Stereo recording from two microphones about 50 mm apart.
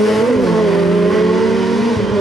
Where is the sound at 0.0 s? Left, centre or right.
Centre.